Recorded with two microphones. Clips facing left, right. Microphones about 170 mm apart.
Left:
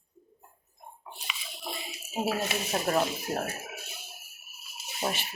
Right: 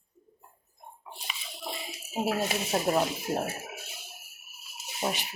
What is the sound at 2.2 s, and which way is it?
Speech, 20° right (ahead or behind).